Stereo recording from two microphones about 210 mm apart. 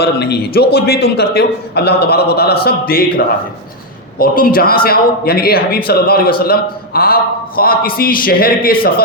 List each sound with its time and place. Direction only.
0.0 s a man's voice: 50° left (ahead or behind)